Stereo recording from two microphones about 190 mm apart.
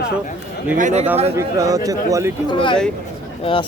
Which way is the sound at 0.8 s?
40° right (ahead or behind).